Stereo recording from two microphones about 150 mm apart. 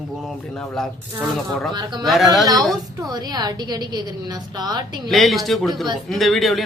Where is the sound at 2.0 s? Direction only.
Centre (ahead or behind).